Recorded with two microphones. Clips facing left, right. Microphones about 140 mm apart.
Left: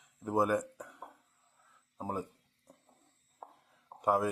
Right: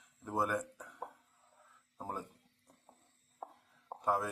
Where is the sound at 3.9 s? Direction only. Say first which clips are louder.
Right 4 dB; 65° right (ahead or behind).